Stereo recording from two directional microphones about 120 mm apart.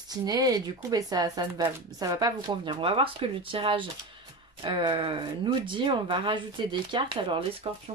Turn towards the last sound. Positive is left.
turn(degrees=-50)  # may be behind; listen again after turning